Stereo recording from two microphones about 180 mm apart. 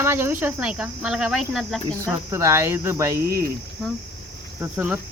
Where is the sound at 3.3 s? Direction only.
55° right (ahead or behind).